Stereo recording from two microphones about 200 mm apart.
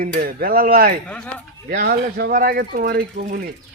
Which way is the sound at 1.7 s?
45° right (ahead or behind).